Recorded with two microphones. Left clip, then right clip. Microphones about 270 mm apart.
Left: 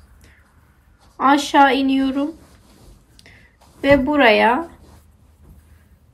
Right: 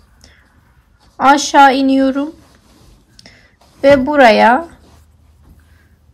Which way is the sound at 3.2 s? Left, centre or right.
Right.